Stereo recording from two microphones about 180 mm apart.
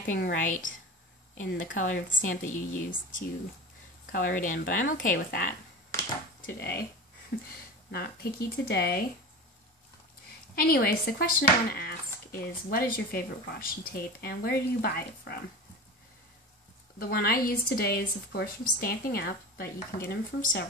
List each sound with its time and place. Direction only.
0.0 s a woman's voice: 50° left (ahead or behind)
6.4 s speech: 65° left (ahead or behind)
7.3 s a woman's voice: 50° left (ahead or behind)
7.9 s speech: 60° left (ahead or behind)
10.5 s speech: 55° left (ahead or behind)
17.0 s speech: 55° left (ahead or behind)